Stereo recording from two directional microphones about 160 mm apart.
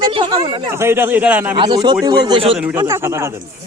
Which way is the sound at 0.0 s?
30° right (ahead or behind).